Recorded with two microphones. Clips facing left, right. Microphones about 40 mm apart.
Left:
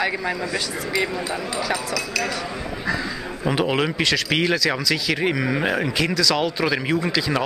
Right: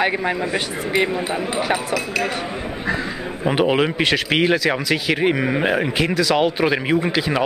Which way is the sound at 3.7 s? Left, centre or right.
Centre.